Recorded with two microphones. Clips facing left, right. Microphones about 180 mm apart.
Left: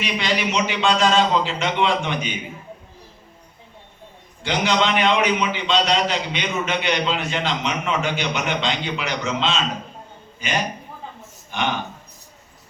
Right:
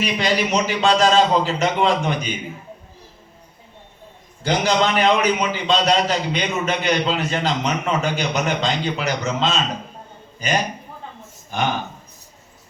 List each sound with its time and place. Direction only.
0.0 s a man's voice: 40° right (ahead or behind)
4.4 s a man's voice: 40° right (ahead or behind)